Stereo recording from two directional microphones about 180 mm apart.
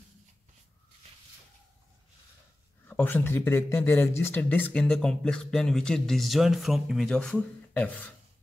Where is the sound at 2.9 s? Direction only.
10° left (ahead or behind).